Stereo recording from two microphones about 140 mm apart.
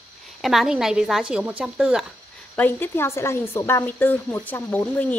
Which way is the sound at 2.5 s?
15° left (ahead or behind).